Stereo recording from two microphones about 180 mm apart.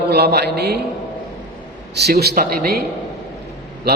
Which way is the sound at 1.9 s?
65° right (ahead or behind).